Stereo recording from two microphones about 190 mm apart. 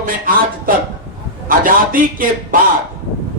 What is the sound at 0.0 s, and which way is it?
Speech, 45° right (ahead or behind).